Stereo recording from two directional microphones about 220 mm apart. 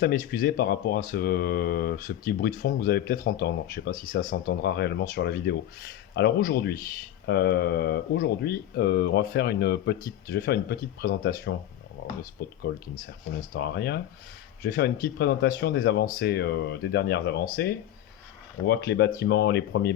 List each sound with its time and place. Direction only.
0.0 s speech: 45° left (ahead or behind)
12.0 s a sound: 55° left (ahead or behind)
12.4 s speech: 45° left (ahead or behind)
13.6 s speech: 45° left (ahead or behind)
18.6 s speech: 50° left (ahead or behind)